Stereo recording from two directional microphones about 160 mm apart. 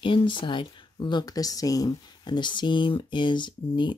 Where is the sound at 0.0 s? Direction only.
30° left (ahead or behind).